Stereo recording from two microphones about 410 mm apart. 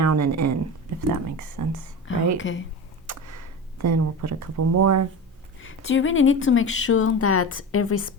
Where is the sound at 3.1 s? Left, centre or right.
Right.